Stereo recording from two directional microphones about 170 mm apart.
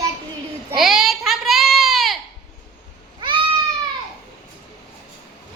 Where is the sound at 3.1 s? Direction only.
25° right (ahead or behind).